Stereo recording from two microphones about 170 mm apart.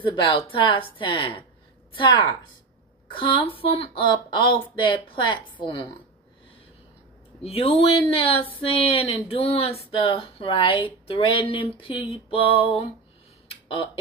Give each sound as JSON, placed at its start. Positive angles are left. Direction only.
{"t": 0.0, "sound": "speech", "side_deg": 30}
{"t": 7.4, "sound": "speech", "side_deg": 35}
{"t": 13.5, "sound": "a sound", "side_deg": 30}